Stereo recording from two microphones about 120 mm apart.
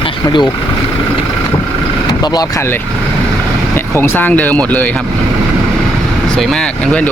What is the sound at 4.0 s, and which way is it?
Speech, 15° left (ahead or behind).